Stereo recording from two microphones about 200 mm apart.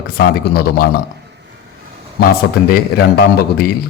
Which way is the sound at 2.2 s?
45° left (ahead or behind).